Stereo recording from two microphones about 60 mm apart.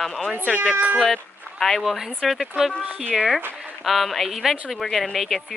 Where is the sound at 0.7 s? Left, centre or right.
Right.